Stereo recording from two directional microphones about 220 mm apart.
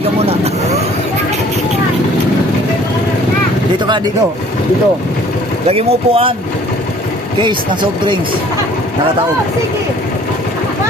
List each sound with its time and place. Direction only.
0.0 s vehicle: 30° right (ahead or behind)
5.6 s speech: 25° right (ahead or behind)